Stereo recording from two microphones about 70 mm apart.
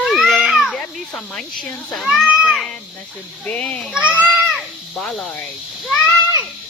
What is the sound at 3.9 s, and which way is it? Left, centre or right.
Speech, right.